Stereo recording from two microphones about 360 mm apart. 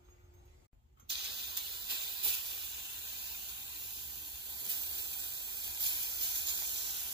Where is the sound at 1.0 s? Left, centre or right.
Right.